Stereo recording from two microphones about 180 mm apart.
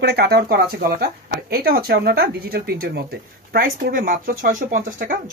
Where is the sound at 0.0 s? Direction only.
65° right (ahead or behind).